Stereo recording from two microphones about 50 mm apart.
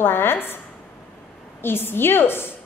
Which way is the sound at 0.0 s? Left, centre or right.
Left.